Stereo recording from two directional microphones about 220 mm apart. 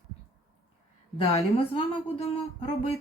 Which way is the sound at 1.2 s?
30° left (ahead or behind).